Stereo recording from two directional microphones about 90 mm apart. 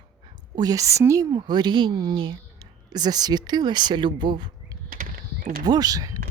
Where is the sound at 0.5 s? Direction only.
45° right (ahead or behind).